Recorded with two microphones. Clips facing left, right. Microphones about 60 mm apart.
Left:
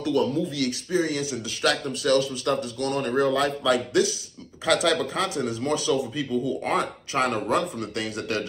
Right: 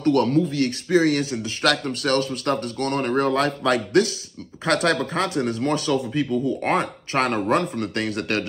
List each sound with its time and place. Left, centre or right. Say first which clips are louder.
0.0 s speech: right 4 dB; right
0.5 s speech: right 4 dB; right
0.9 s speech: right 7 dB; right
1.2 s speech: right 3 dB; right